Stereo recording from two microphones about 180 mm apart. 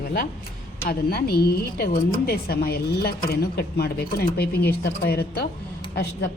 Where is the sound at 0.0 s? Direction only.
55° left (ahead or behind).